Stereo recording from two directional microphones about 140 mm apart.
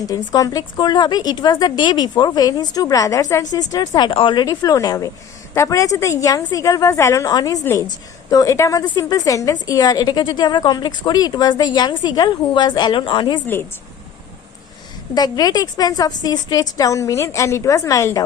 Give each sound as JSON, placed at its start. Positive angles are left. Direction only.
{"t": 0.0, "sound": "a woman's voice", "side_deg": 25}
{"t": 4.4, "sound": "a woman's voice", "side_deg": 25}
{"t": 15.1, "sound": "a woman's voice", "side_deg": 30}